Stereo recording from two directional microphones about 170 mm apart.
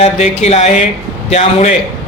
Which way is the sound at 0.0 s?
40° left (ahead or behind).